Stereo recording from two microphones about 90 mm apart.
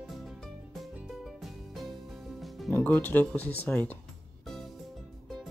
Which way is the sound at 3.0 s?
20° left (ahead or behind).